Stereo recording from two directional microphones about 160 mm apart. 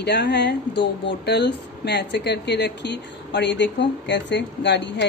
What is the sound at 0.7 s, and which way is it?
Speech, 30° left (ahead or behind).